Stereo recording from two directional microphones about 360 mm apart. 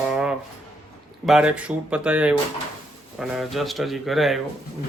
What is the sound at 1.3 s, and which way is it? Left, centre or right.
Speech, centre.